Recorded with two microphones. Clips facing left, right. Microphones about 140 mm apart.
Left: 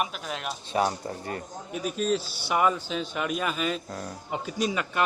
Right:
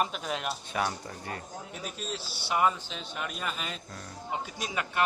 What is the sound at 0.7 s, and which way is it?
Speech, 35° left (ahead or behind).